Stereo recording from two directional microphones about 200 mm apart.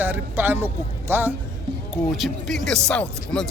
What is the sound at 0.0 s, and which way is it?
A man's voice, 10° right (ahead or behind).